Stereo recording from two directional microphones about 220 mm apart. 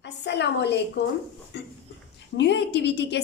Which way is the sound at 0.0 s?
50° left (ahead or behind).